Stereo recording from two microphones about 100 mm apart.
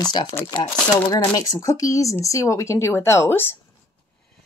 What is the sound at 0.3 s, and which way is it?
Speech, 25° left (ahead or behind).